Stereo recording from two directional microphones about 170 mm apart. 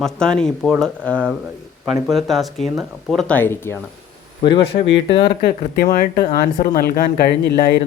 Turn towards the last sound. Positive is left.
turn(degrees=70)  # may be behind; listen again after turning